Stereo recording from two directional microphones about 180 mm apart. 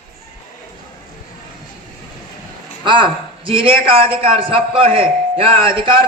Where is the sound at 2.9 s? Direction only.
25° right (ahead or behind).